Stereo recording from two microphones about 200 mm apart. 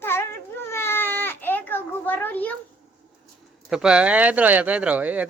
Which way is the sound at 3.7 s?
5° right (ahead or behind).